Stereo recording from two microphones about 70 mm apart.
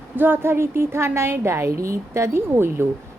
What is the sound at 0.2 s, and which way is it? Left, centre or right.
Speech, right.